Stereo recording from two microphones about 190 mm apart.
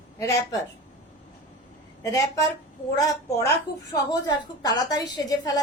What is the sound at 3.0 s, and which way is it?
A woman's voice, 20° left (ahead or behind).